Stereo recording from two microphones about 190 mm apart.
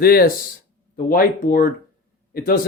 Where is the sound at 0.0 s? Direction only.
55° left (ahead or behind).